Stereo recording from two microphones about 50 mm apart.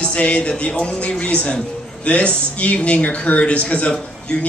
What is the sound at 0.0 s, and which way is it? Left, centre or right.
Speech, left.